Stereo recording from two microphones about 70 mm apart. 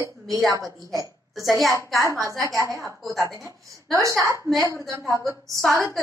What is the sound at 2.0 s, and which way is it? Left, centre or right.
Speech, right.